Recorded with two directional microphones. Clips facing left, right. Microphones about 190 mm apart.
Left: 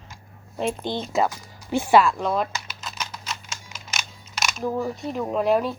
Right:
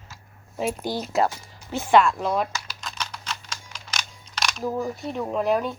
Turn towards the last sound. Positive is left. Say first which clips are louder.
# left 2 dB
turn(degrees=0)  # may be behind; listen again after turning